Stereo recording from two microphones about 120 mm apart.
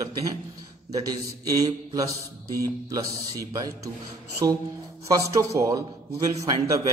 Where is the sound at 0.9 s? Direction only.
30° right (ahead or behind).